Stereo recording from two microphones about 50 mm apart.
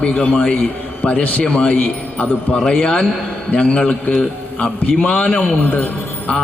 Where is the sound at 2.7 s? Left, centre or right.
Left.